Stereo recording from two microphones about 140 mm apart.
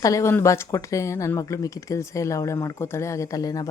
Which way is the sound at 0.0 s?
20° left (ahead or behind).